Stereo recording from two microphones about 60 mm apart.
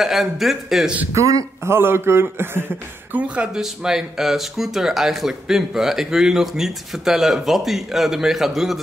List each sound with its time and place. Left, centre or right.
0.0 s speech: centre
1.1 s speech: right
1.6 s speech: right
3.5 s speech: centre